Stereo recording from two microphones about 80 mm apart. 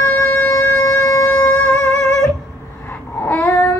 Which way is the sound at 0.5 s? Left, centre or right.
Left.